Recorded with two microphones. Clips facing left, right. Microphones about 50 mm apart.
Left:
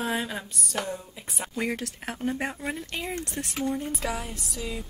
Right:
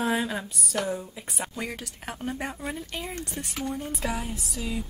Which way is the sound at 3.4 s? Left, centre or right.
Left.